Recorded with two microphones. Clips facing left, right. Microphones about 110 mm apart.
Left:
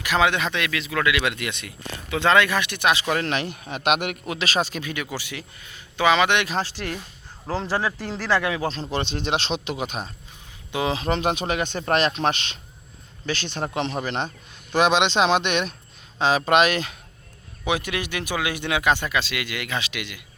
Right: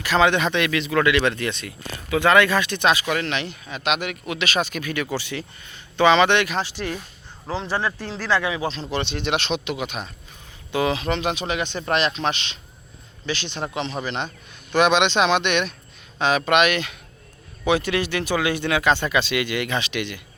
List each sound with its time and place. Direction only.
0.0 s speech: 10° left (ahead or behind)
2.9 s speech: 30° left (ahead or behind); by 4.2 s 50° left (ahead or behind)
4.3 s a man's voice: 35° left (ahead or behind)
5.1 s speech: 10° left (ahead or behind)
6.7 s speech: 15° right (ahead or behind)
7.6 s speech: 5° left (ahead or behind)
8.9 s a man's voice: 40° left (ahead or behind)
10.7 s speech: 20° left (ahead or behind)
10.9 s a man's voice: 40° left (ahead or behind)
17.7 s speech: 15° left (ahead or behind)
19.1 s speech: centre (ahead or behind)